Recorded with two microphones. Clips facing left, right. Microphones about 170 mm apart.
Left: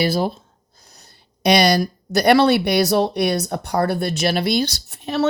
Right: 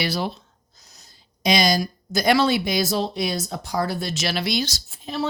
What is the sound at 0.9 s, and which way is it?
Speech, 60° left (ahead or behind).